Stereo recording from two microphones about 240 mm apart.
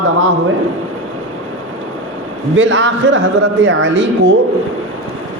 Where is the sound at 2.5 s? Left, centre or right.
Right.